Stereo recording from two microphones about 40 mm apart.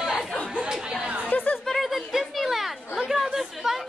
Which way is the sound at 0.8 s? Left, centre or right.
Right.